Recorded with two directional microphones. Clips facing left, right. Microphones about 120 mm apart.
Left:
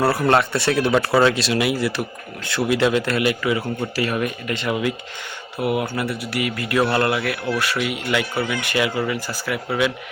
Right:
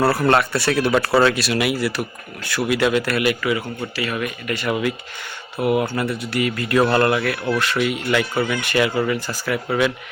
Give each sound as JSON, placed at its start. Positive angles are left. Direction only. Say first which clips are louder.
{"t": 0.0, "sound": "speech", "louder": "right 1 dB", "side_deg": 15}
{"t": 3.9, "sound": "speech", "louder": "left 1 dB", "side_deg": 35}
{"t": 5.6, "sound": "speech", "louder": "right 3 dB", "side_deg": 10}